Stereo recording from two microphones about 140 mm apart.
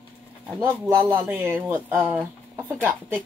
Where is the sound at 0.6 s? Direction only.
20° right (ahead or behind).